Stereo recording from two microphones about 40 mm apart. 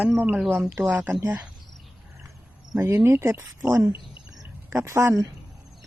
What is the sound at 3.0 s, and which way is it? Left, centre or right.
Speech, right.